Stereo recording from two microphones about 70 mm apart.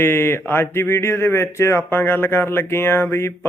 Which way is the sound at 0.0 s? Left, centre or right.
Left.